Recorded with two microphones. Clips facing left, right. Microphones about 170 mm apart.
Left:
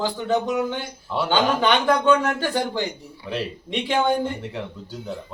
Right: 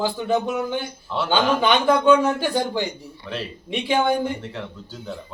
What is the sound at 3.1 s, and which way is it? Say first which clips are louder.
Speech: left 4 dB; 10° left (ahead or behind).